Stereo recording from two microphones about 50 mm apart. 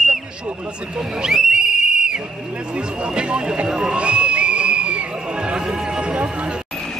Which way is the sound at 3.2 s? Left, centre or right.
Centre.